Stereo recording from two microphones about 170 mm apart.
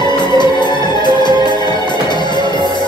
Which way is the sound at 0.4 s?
25° left (ahead or behind).